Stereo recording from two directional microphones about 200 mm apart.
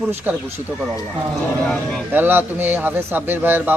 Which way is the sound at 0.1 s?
10° right (ahead or behind).